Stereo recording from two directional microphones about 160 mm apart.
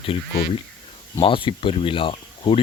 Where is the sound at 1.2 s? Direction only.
30° left (ahead or behind).